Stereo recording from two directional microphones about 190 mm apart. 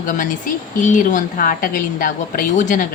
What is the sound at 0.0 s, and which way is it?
A woman's voice, 45° left (ahead or behind).